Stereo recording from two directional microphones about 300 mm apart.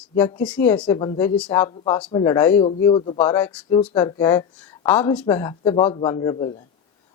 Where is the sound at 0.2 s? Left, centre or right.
Centre.